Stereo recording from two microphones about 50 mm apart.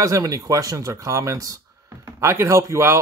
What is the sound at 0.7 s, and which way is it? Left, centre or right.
Speech, right.